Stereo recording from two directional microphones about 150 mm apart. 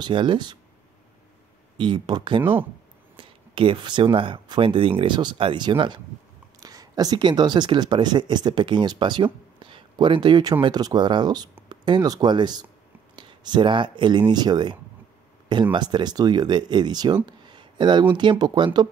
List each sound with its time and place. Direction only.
0.0 s speech: 30° right (ahead or behind)
1.8 s speech: 30° right (ahead or behind)